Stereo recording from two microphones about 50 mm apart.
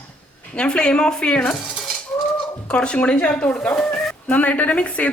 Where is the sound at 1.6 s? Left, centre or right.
Centre.